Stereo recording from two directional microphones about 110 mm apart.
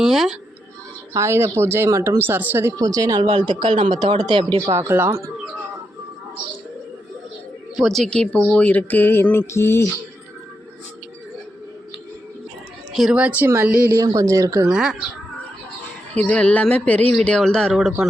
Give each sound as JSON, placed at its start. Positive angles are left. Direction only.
{"t": 0.0, "sound": "a sound", "side_deg": -5}
{"t": 1.1, "sound": "speech", "side_deg": -25}
{"t": 3.3, "sound": "speech", "side_deg": -45}
{"t": 4.6, "sound": "speech", "side_deg": -25}
{"t": 7.8, "sound": "speech", "side_deg": 0}
{"t": 12.9, "sound": "speech", "side_deg": -5}
{"t": 14.1, "sound": "speech", "side_deg": -30}
{"t": 14.7, "sound": "speech", "side_deg": -5}
{"t": 16.1, "sound": "speech", "side_deg": 15}
{"t": 17.7, "sound": "speech", "side_deg": -5}